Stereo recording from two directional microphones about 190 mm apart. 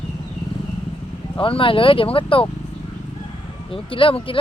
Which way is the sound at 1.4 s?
30° left (ahead or behind).